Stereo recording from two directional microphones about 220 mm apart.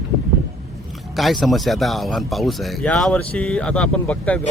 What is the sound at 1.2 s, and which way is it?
Speech, centre (ahead or behind).